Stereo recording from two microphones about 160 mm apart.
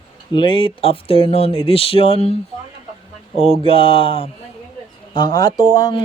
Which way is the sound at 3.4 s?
35° left (ahead or behind).